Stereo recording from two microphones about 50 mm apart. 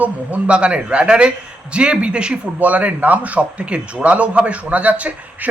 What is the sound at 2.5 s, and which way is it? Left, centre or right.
A man's voice, right.